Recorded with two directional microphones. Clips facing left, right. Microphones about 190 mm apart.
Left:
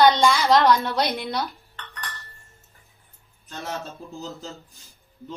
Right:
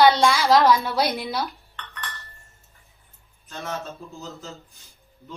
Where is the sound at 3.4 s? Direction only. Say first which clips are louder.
Even; 35° left (ahead or behind).